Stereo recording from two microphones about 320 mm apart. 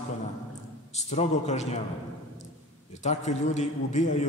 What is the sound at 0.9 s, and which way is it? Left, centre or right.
Speech, left.